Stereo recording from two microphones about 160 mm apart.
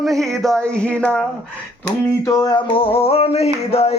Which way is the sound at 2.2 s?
25° left (ahead or behind).